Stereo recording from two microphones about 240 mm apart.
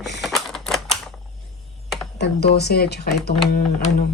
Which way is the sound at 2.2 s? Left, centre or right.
Left.